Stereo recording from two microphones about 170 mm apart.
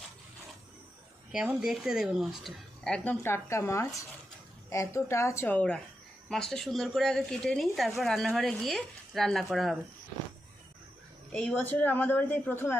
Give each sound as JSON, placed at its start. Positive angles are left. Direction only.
{"t": 1.3, "sound": "speech", "side_deg": -5}
{"t": 11.3, "sound": "speech", "side_deg": 5}